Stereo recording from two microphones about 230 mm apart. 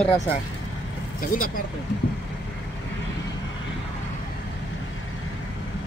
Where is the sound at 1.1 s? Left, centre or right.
Left.